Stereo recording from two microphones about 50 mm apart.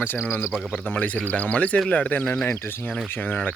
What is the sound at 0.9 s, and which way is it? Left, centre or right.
Speech, left.